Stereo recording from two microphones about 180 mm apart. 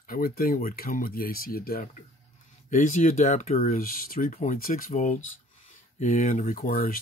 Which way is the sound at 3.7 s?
55° left (ahead or behind).